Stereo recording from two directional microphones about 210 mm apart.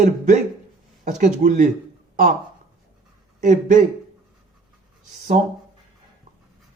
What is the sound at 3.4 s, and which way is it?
Speech, 35° right (ahead or behind).